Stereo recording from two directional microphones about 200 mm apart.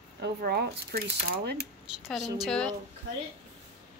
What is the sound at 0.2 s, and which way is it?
Speech, 50° right (ahead or behind).